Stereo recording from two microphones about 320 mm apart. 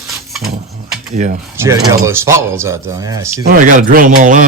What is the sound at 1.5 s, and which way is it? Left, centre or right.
Speech, centre.